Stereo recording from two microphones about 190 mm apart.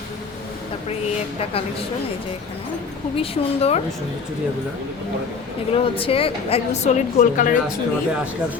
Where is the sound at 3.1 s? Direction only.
30° left (ahead or behind).